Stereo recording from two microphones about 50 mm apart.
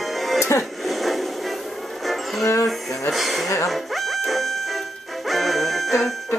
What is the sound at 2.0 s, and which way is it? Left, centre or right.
Music, centre.